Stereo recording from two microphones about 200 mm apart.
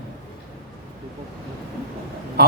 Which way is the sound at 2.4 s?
50° right (ahead or behind).